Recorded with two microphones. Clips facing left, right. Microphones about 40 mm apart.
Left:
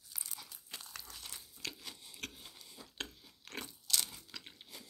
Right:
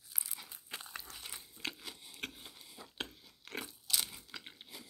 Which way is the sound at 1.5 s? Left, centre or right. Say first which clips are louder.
Right 3 dB; right.